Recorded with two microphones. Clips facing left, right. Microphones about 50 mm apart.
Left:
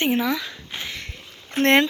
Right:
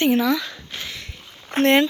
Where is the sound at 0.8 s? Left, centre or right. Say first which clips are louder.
Left 1 dB; left.